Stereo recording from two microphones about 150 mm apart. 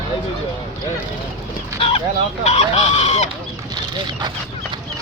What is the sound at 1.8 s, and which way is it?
Chicken, 40° left (ahead or behind).